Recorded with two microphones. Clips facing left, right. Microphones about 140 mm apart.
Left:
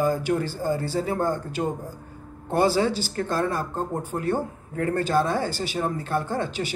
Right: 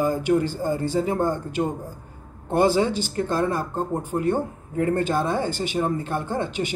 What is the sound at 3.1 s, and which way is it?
Speech, 15° right (ahead or behind).